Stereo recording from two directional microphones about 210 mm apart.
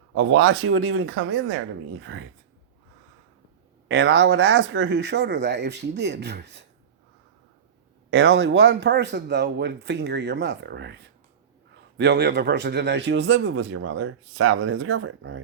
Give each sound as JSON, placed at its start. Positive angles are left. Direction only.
{"t": 0.1, "sound": "speech", "side_deg": -75}
{"t": 3.8, "sound": "speech", "side_deg": -55}
{"t": 8.1, "sound": "speech", "side_deg": -55}